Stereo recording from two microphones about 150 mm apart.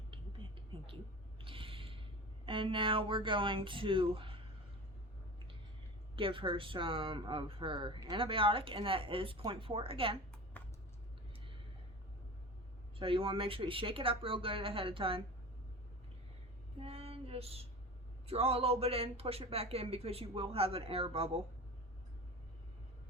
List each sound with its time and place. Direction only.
0.1 s a sound: 35° right (ahead or behind)
1.4 s mechanisms: 35° right (ahead or behind)
2.5 s speech: 35° right (ahead or behind)
6.1 s speech: 35° right (ahead or behind)
10.5 s a sound: 10° left (ahead or behind)
13.0 s speech: 35° right (ahead or behind)
16.8 s female singing: 40° right (ahead or behind)
18.3 s speech: 40° right (ahead or behind)